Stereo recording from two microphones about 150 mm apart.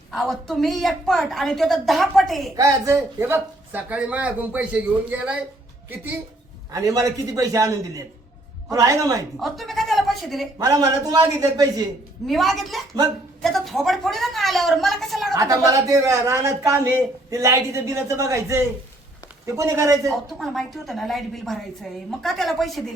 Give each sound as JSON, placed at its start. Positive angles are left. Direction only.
{"t": 0.1, "sound": "a woman's voice", "side_deg": 0}
{"t": 2.6, "sound": "speech", "side_deg": -20}
{"t": 6.7, "sound": "speech", "side_deg": -20}
{"t": 9.4, "sound": "speech", "side_deg": 0}
{"t": 10.6, "sound": "speech", "side_deg": -25}
{"t": 12.2, "sound": "a woman's voice", "side_deg": 0}
{"t": 15.3, "sound": "speech", "side_deg": -25}
{"t": 20.1, "sound": "a woman's voice", "side_deg": 0}